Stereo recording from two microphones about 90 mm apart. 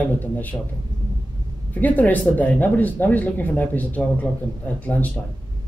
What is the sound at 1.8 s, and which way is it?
Speech, 20° left (ahead or behind).